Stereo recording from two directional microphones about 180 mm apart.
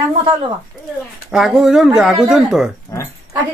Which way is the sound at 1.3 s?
5° right (ahead or behind).